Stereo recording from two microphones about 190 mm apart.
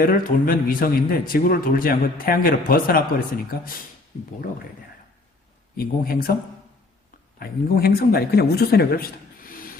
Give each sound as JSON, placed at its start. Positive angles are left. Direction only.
{"t": 0.0, "sound": "speech", "side_deg": 50}
{"t": 5.7, "sound": "speech", "side_deg": 50}
{"t": 7.3, "sound": "speech", "side_deg": 55}